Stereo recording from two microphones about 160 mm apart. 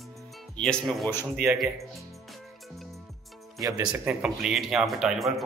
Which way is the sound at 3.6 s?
25° right (ahead or behind).